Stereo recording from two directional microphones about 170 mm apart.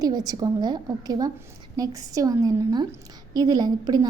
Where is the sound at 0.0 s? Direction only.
20° right (ahead or behind).